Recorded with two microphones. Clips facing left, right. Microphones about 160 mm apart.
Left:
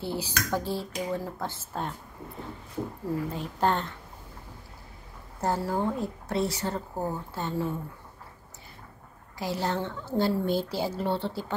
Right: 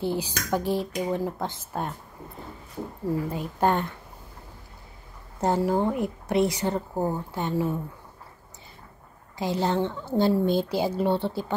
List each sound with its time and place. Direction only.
0.0 s speech: 15° right (ahead or behind)
3.3 s speech: 10° right (ahead or behind)
5.4 s speech: 20° right (ahead or behind)
9.4 s speech: 20° right (ahead or behind)